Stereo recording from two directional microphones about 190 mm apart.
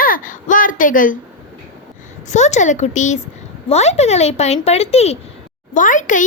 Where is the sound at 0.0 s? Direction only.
45° left (ahead or behind).